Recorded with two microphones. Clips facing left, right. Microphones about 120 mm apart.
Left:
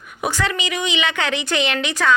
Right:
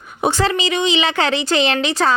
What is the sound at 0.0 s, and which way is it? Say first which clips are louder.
A woman's voice: right 5 dB; 30° right (ahead or behind).